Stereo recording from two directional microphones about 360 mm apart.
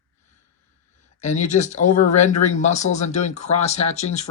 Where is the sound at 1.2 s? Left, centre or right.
Centre.